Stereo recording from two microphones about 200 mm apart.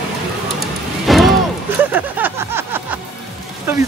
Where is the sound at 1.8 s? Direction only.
10° right (ahead or behind).